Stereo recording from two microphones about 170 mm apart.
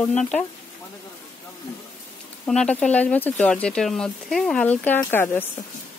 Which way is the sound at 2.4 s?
5° left (ahead or behind).